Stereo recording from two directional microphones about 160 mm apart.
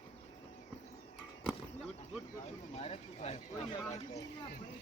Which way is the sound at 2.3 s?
40° left (ahead or behind).